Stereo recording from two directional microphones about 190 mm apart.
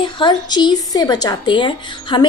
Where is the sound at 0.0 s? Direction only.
25° left (ahead or behind).